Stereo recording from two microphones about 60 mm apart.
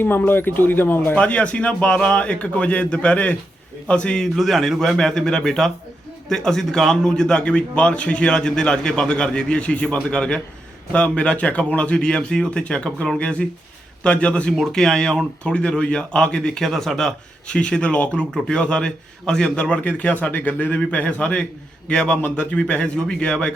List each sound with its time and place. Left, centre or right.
0.3 s speech: left
1.1 s a man's voice: left
4.4 s a man's voice: centre
14.5 s a man's voice: centre